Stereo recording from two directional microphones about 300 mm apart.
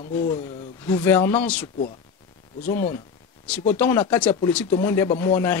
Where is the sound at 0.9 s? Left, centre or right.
Centre.